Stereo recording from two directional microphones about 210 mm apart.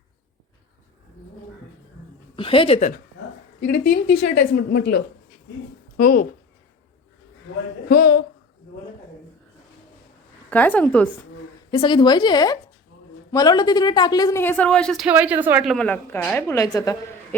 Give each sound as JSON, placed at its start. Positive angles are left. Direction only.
{"t": 2.3, "sound": "a woman's voice", "side_deg": 25}
{"t": 3.7, "sound": "a woman's voice", "side_deg": 55}
{"t": 6.0, "sound": "a woman's voice", "side_deg": 45}
{"t": 7.9, "sound": "a woman's voice", "side_deg": 45}
{"t": 10.5, "sound": "speech", "side_deg": 5}
{"t": 11.7, "sound": "a woman's voice", "side_deg": 25}